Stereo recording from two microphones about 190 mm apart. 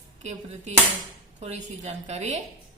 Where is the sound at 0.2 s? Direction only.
35° right (ahead or behind).